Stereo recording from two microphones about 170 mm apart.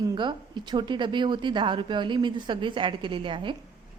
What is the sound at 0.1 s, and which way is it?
A woman's voice, 25° right (ahead or behind).